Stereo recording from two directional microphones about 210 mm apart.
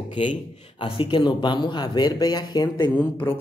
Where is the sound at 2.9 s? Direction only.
10° left (ahead or behind).